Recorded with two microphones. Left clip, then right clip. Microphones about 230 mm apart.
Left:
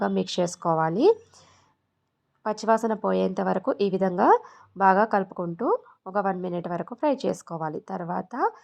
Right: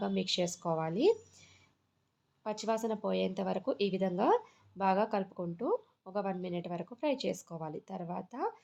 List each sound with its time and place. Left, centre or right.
0.0 s speech: left
2.4 s speech: left